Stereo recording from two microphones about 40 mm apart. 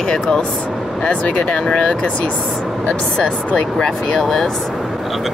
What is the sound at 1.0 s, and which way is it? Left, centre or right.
Speech, left.